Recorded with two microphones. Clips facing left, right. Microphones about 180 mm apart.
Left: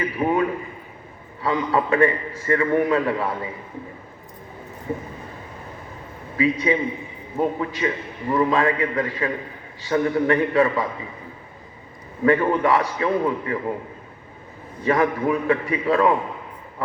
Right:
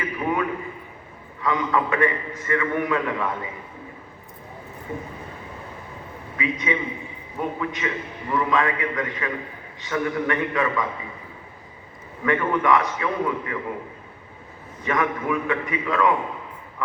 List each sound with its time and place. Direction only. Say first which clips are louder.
0.0 s a sound: left 4 dB; 30° left (ahead or behind)
1.4 s a man's voice: left 1 dB; 30° left (ahead or behind)
6.3 s a man's voice: left 6 dB; 35° left (ahead or behind)
12.2 s a man's voice: left 4 dB; 35° left (ahead or behind)
14.8 s a man's voice: left 4 dB; 35° left (ahead or behind)